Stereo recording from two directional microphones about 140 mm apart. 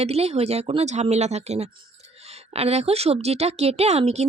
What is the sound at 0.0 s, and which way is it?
A woman's voice, 50° right (ahead or behind).